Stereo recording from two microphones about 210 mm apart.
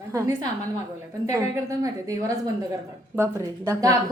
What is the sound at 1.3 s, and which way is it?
A woman's voice, 15° right (ahead or behind).